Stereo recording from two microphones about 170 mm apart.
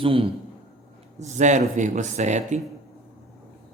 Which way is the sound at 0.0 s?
35° right (ahead or behind).